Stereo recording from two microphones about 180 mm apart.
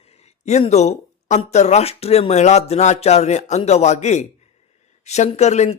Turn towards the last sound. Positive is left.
turn(degrees=40)  # may be behind; listen again after turning